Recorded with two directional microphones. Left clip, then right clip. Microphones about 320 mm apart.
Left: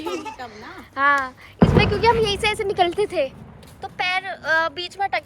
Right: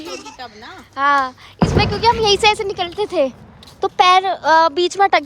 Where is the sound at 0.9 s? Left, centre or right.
Centre.